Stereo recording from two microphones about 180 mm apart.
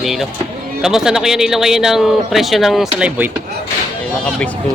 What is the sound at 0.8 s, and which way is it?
Speech, 5° right (ahead or behind).